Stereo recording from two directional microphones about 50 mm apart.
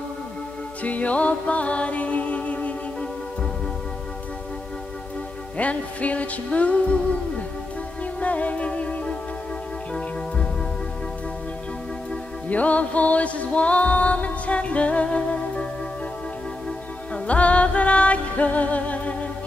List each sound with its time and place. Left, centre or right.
0.8 s music: left
5.6 s music: left
12.4 s music: left
17.1 s music: left